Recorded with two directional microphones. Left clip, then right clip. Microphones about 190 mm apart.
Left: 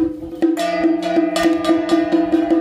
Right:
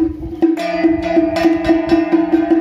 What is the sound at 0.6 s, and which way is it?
Music, 15° left (ahead or behind).